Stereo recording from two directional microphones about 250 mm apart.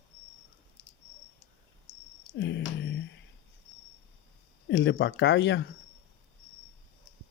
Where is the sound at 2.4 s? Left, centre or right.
Left.